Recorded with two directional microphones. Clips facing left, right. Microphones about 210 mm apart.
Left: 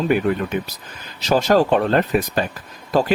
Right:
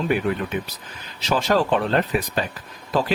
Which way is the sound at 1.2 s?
40° left (ahead or behind).